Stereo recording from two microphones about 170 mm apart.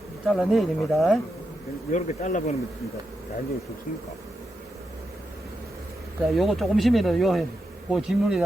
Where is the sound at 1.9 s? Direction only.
45° left (ahead or behind).